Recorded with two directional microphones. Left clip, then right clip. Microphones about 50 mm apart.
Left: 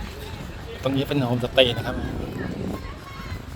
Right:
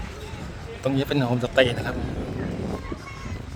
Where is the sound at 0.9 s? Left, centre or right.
Right.